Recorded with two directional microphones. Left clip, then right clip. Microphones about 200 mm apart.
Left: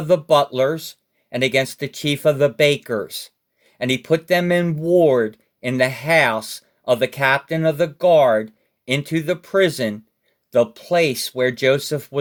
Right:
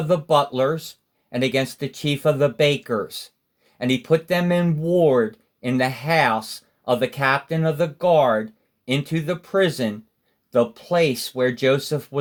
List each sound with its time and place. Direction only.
0.1 s speech: 40° left (ahead or behind)